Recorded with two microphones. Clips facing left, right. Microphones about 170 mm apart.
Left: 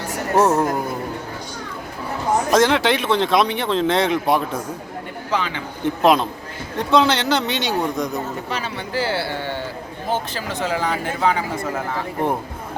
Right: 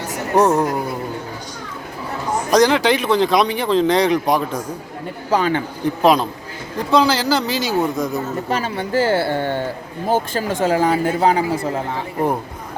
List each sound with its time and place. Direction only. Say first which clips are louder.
0.3 s speech: right 2 dB; centre (ahead or behind)
2.5 s speech: right 3 dB; centre (ahead or behind)
5.3 s speech: right 6 dB; 45° right (ahead or behind)
5.8 s speech: even; centre (ahead or behind)
8.4 s speech: right 5 dB; 45° right (ahead or behind)